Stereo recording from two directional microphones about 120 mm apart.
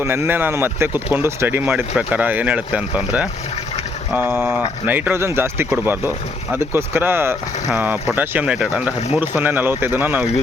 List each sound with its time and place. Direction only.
0.0 s speech: 20° right (ahead or behind)